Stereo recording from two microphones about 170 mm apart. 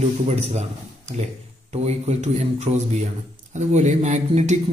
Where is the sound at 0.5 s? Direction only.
40° right (ahead or behind).